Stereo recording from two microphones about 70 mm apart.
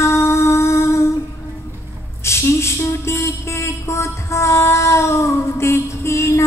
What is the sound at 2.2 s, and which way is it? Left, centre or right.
Music, left.